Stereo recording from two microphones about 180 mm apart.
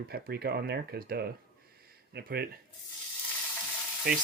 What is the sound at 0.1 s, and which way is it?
Speech, 60° right (ahead or behind).